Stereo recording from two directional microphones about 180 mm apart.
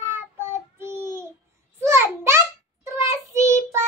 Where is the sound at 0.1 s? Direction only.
15° right (ahead or behind).